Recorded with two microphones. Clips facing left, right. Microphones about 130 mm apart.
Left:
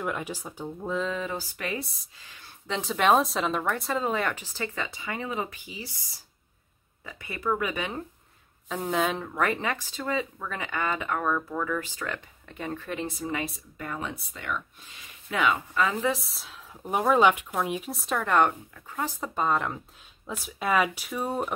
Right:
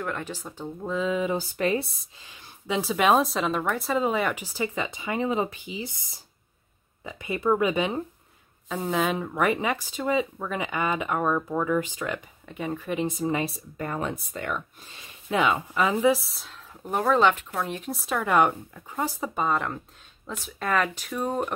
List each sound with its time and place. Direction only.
0.0 s speech: 10° left (ahead or behind); by 2.4 s 25° right (ahead or behind)
2.6 s speech: 10° right (ahead or behind)
8.6 s speech: centre (ahead or behind)
13.3 s speech: 35° right (ahead or behind)
15.2 s speech: 20° right (ahead or behind)
16.0 s speech: 5° right (ahead or behind)